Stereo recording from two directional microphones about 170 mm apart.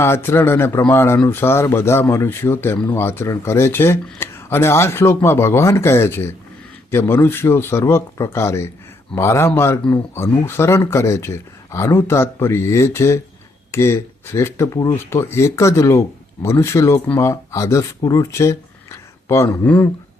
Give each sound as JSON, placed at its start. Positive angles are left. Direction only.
{"t": 0.0, "sound": "speech", "side_deg": 15}